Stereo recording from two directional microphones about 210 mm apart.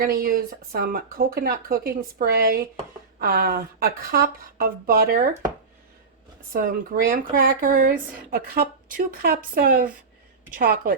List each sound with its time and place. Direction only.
0.0 s speech: 45° right (ahead or behind)
6.5 s speech: 40° right (ahead or behind)